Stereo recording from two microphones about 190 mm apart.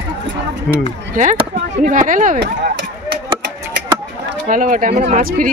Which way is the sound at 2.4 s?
60° right (ahead or behind).